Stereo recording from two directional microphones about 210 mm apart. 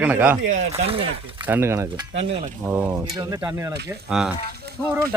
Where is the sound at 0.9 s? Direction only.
25° right (ahead or behind).